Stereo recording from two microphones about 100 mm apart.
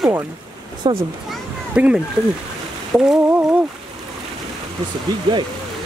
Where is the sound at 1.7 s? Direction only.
10° right (ahead or behind).